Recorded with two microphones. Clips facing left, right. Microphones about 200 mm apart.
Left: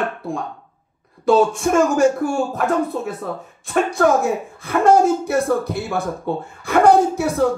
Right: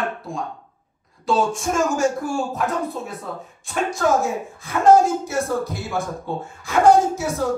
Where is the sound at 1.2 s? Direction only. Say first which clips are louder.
Left 6 dB; 60° left (ahead or behind).